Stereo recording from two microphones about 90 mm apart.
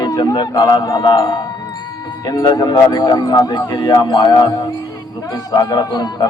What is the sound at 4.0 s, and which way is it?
Speech, 50° left (ahead or behind).